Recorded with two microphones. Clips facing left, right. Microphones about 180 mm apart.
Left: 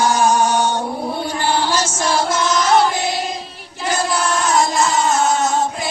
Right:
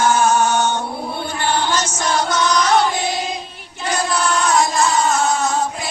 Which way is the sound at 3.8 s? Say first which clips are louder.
Left 1 dB; centre (ahead or behind).